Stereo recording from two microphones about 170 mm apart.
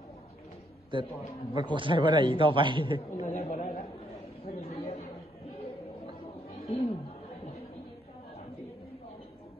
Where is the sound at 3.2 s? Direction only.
45° left (ahead or behind).